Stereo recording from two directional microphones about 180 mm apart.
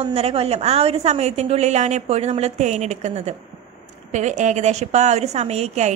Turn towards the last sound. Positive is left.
turn(degrees=-40)  # may be behind; listen again after turning